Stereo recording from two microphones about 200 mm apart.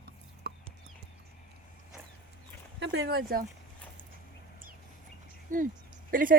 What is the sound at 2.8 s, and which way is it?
Speech, 55° right (ahead or behind).